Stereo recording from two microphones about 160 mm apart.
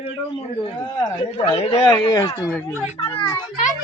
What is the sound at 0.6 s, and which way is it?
A man's voice, 30° left (ahead or behind).